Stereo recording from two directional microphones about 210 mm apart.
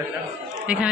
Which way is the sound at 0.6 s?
5° right (ahead or behind).